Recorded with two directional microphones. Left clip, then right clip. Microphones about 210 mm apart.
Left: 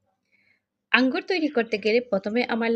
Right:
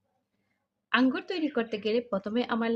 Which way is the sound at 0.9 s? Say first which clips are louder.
Left 5 dB; 20° left (ahead or behind).